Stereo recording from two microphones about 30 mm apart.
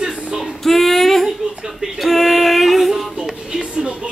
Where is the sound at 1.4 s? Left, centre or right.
Right.